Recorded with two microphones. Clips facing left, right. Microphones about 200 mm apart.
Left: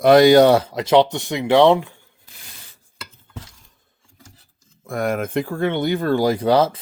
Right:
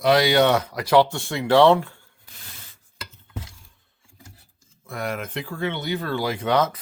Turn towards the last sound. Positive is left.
turn(degrees=30)  # may be behind; listen again after turning